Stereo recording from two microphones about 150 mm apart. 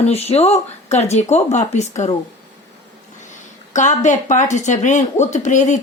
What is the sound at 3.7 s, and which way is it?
Speech, 55° left (ahead or behind).